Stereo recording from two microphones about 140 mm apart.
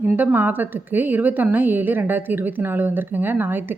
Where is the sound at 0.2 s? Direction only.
10° right (ahead or behind).